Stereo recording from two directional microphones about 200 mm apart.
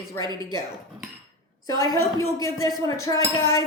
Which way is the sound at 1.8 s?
15° left (ahead or behind).